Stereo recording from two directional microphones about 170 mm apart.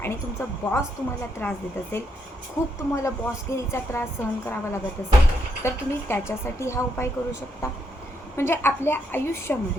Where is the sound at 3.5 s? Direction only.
15° left (ahead or behind).